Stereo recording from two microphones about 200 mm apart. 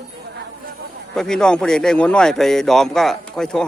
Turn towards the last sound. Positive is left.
turn(degrees=5)  # may be behind; listen again after turning